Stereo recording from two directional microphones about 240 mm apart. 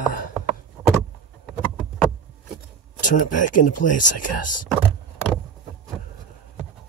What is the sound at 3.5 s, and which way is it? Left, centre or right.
Speech, left.